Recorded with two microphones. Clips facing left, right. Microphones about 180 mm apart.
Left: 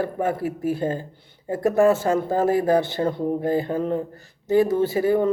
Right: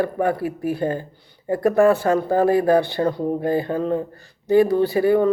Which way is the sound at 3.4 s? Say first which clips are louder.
Right 1 dB; 15° left (ahead or behind).